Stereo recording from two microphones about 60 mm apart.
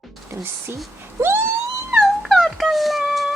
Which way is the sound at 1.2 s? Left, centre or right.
Right.